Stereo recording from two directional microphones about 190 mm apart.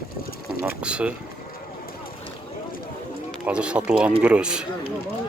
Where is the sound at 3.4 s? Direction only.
5° right (ahead or behind).